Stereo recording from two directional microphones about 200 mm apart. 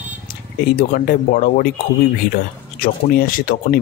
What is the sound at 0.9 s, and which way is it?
Speech, 45° left (ahead or behind).